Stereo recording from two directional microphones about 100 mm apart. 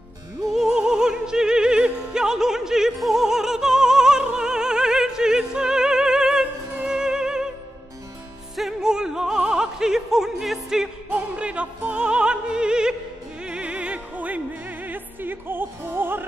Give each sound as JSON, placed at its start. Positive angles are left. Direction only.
{"t": 0.5, "sound": "music", "side_deg": -5}
{"t": 8.5, "sound": "music", "side_deg": -5}